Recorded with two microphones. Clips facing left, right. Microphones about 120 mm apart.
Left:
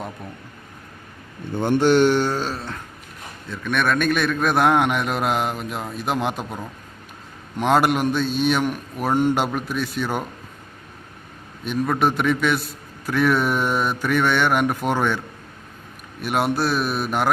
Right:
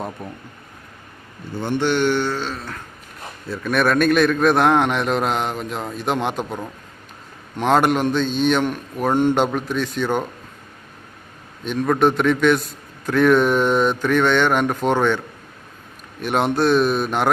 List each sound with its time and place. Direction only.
1.6 s speech: 45° left (ahead or behind)
3.5 s a man's voice: 5° right (ahead or behind)
11.6 s a man's voice: 5° left (ahead or behind)
16.2 s a man's voice: 5° left (ahead or behind)